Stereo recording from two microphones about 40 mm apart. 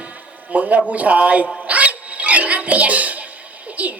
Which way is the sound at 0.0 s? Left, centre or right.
Right.